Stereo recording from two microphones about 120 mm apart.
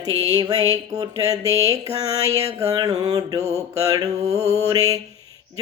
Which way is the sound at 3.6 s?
30° right (ahead or behind).